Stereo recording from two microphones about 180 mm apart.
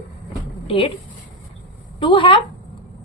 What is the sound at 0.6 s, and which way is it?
Speech, 30° left (ahead or behind).